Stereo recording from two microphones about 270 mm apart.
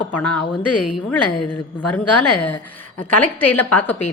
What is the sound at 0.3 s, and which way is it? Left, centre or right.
Speech, left.